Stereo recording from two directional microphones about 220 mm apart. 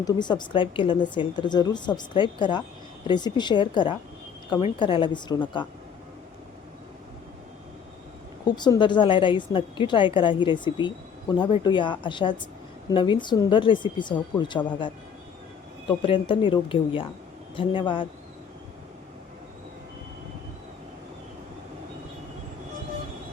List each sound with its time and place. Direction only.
0.0 s a woman's voice: 20° left (ahead or behind)
8.4 s a woman's voice: 20° left (ahead or behind)
15.9 s a woman's voice: 25° left (ahead or behind)